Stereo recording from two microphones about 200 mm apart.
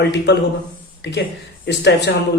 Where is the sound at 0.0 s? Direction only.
60° left (ahead or behind).